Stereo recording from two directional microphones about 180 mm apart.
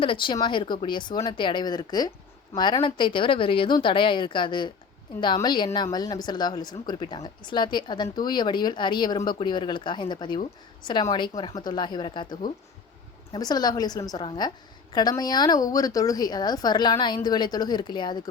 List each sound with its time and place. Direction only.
0.0 s speech: 30° left (ahead or behind)